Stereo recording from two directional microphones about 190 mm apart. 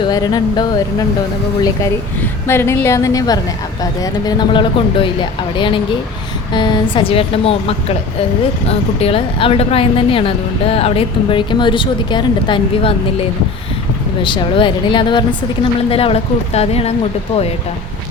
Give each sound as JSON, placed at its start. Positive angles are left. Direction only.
{"t": 0.1, "sound": "speech", "side_deg": 20}
{"t": 2.5, "sound": "a woman's voice", "side_deg": 15}
{"t": 14.2, "sound": "speech", "side_deg": 25}